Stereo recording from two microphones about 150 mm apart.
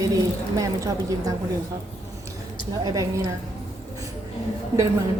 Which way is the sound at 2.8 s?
25° right (ahead or behind).